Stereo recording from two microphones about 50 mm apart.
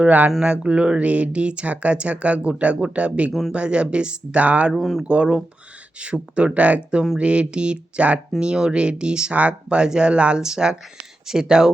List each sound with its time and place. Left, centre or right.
0.4 s speech: right
4.7 s speech: centre
5.0 s speech: right